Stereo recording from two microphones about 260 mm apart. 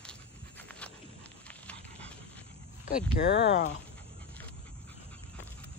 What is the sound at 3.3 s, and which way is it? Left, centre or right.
Speech, left.